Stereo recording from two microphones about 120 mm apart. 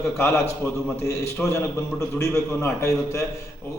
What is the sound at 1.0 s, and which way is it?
A man's voice, 25° left (ahead or behind).